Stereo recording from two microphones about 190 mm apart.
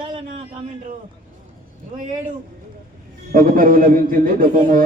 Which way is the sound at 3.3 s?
45° right (ahead or behind).